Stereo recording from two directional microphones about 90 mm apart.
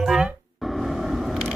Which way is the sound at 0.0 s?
10° right (ahead or behind).